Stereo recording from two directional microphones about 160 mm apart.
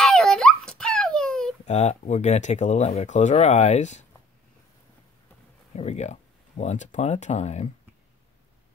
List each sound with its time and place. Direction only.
0.0 s a sound: 5° left (ahead or behind)
1.7 s speech: 45° left (ahead or behind)
5.7 s speech: 45° left (ahead or behind)